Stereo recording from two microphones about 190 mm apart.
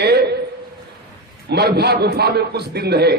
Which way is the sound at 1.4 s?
60° right (ahead or behind).